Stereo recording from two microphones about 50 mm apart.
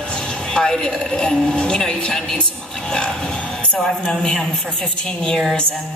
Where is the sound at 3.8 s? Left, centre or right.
Centre.